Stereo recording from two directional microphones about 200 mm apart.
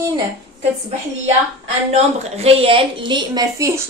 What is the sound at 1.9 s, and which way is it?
A woman's voice, 30° right (ahead or behind).